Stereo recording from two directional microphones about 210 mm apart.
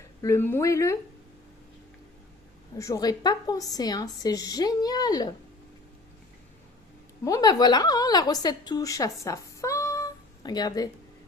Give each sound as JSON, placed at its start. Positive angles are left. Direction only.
{"t": 0.2, "sound": "a woman's voice", "side_deg": 15}
{"t": 2.7, "sound": "a woman's voice", "side_deg": 15}
{"t": 7.3, "sound": "a woman's voice", "side_deg": 20}